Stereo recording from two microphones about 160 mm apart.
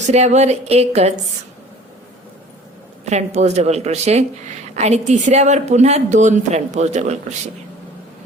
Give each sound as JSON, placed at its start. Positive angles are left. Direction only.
{"t": 0.1, "sound": "a woman's voice", "side_deg": -45}
{"t": 3.1, "sound": "a woman's voice", "side_deg": -45}